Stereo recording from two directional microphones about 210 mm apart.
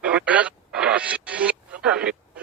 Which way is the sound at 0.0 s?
5° right (ahead or behind).